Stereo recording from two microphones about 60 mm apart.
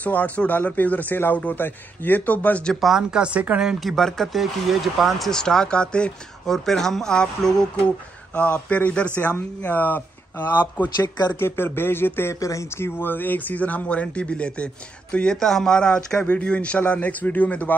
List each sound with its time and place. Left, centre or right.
0.0 s speech: left
2.7 s speech: centre
3.0 s speech: centre
3.9 s speech: centre
5.3 s speech: centre
6.4 s speech: centre
8.4 s speech: left
11.3 s speech: left
12.4 s speech: left; by 16.2 s centre
16.2 s speech: left